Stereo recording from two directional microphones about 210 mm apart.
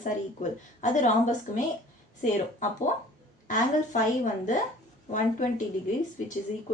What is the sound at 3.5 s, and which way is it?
A woman's voice, 35° left (ahead or behind).